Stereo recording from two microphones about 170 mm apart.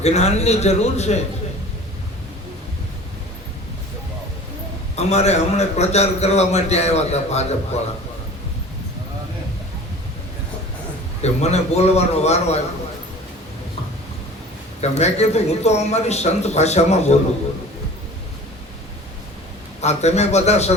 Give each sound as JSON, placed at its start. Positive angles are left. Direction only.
{"t": 0.0, "sound": "a man's voice", "side_deg": 40}
{"t": 4.9, "sound": "a man's voice", "side_deg": 40}
{"t": 11.2, "sound": "a man's voice", "side_deg": 40}
{"t": 14.8, "sound": "a man's voice", "side_deg": 40}
{"t": 19.8, "sound": "a man's voice", "side_deg": 40}